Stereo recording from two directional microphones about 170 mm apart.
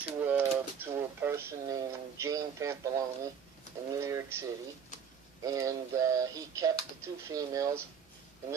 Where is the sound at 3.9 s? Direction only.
15° right (ahead or behind).